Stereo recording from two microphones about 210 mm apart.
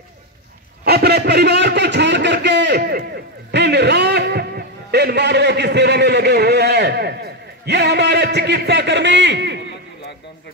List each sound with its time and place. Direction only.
0.8 s a sound: 50° right (ahead or behind)
3.5 s music: 55° right (ahead or behind)
7.6 s a man's voice: 55° right (ahead or behind)